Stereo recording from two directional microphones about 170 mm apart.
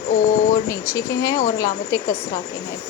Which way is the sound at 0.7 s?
20° left (ahead or behind).